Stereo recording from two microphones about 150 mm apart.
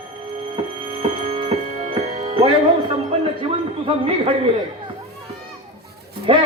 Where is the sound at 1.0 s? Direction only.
35° right (ahead or behind).